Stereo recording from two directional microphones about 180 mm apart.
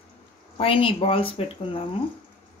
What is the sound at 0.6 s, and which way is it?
Speech, 30° left (ahead or behind).